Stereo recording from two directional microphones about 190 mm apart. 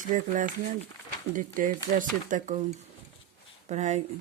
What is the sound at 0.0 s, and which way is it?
Speech, 45° right (ahead or behind).